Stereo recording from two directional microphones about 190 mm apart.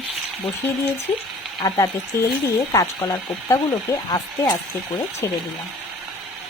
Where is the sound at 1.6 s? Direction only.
20° left (ahead or behind).